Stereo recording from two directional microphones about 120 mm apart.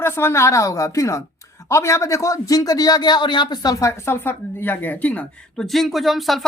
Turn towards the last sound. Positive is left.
turn(degrees=0)  # may be behind; listen again after turning